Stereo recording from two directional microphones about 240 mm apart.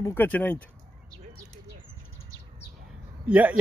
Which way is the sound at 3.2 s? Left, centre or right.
Centre.